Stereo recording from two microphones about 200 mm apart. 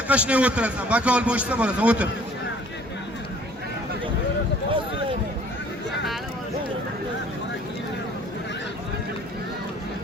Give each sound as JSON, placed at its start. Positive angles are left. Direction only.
{"t": 0.1, "sound": "a man's voice", "side_deg": -5}